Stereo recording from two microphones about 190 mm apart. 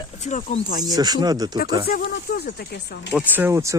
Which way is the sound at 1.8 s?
50° left (ahead or behind).